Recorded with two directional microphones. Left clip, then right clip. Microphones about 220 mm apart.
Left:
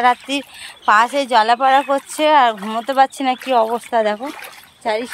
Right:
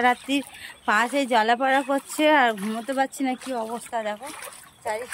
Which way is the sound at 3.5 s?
50° left (ahead or behind).